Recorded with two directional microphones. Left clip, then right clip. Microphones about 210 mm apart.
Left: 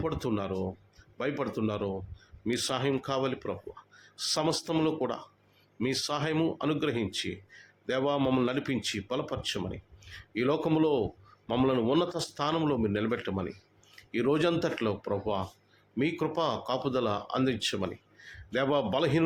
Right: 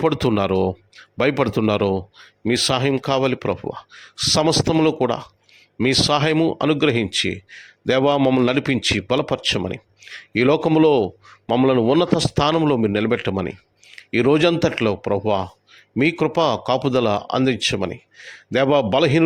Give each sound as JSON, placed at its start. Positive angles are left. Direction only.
{"t": 0.0, "sound": "speech", "side_deg": -40}